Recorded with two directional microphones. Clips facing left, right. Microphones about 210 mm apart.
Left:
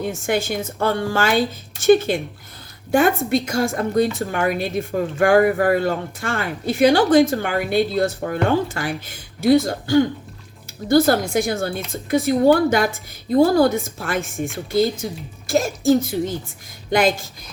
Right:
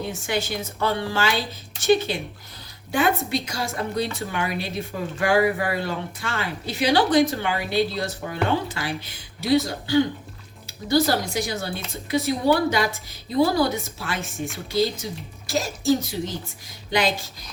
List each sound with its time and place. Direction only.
0.0 s a woman's voice: 50° left (ahead or behind)